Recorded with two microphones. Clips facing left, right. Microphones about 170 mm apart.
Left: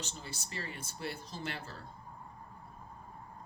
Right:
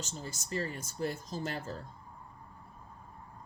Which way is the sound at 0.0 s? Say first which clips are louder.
Right 3 dB; 45° right (ahead or behind).